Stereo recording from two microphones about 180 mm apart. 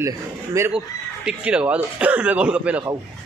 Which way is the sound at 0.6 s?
5° right (ahead or behind).